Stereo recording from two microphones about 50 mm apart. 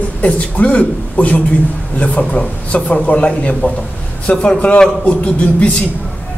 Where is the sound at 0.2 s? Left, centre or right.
Left.